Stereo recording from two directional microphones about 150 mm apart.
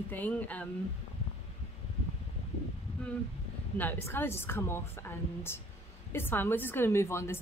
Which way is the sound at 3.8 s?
15° left (ahead or behind).